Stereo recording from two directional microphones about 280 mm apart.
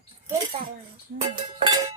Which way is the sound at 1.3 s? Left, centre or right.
Centre.